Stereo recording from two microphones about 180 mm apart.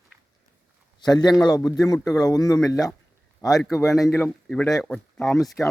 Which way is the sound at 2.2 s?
20° left (ahead or behind).